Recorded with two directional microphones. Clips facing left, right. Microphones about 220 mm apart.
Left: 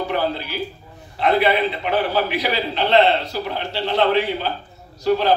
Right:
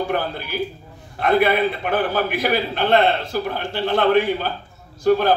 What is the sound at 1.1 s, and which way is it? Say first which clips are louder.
A man's voice: right 1 dB; 50° right (ahead or behind).